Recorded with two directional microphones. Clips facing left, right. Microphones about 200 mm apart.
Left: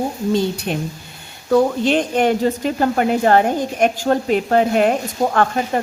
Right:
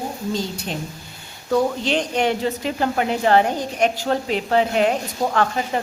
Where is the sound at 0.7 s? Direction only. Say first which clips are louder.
Left 6 dB; 60° left (ahead or behind).